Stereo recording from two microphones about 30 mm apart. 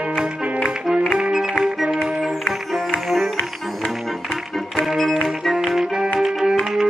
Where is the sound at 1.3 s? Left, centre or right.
Centre.